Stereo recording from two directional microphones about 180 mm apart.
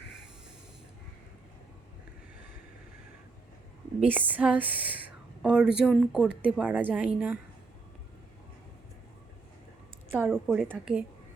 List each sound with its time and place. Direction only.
4.0 s a woman's voice: 10° right (ahead or behind)
10.1 s speech: 10° right (ahead or behind)
10.3 s a woman's voice: centre (ahead or behind)